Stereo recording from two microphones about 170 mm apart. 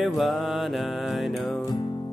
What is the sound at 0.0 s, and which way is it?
Music, centre (ahead or behind).